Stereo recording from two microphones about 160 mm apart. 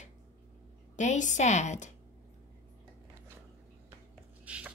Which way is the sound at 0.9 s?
50° left (ahead or behind).